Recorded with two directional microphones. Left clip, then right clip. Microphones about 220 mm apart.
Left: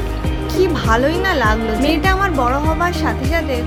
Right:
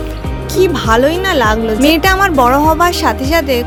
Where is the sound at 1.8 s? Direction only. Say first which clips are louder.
Right 7 dB; 45° right (ahead or behind).